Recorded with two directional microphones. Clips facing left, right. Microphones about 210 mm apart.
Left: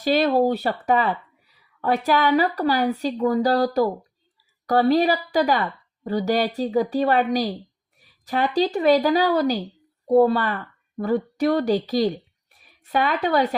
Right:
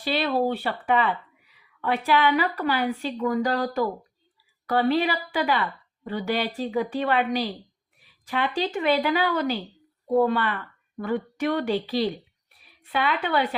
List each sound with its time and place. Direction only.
0.0 s speech: 45° left (ahead or behind)